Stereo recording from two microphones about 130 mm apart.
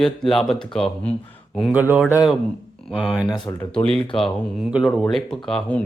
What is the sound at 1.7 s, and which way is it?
Speech, 10° right (ahead or behind).